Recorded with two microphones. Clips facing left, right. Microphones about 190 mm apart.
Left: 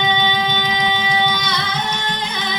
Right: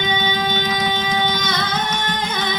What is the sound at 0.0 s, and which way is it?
Music, 45° right (ahead or behind).